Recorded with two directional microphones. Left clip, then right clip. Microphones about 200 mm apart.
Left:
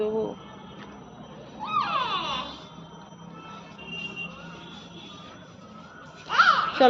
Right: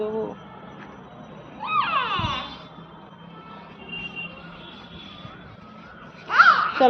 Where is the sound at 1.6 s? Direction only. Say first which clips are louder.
Right 4 dB; 25° right (ahead or behind).